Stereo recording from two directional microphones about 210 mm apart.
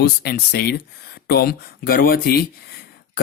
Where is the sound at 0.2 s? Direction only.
50° left (ahead or behind).